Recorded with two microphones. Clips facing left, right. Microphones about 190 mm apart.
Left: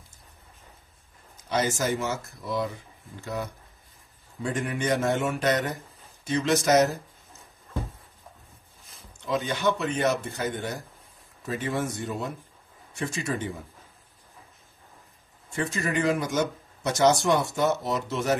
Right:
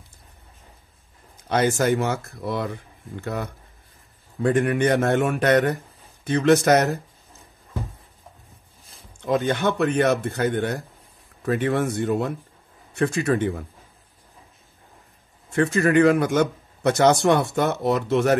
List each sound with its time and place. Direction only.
1.8 s a man's voice: 60° right (ahead or behind)
9.2 s a man's voice: 55° right (ahead or behind)
15.5 s a man's voice: 60° right (ahead or behind)